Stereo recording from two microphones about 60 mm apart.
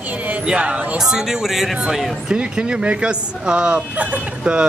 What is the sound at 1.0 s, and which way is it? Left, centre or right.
Speech, centre.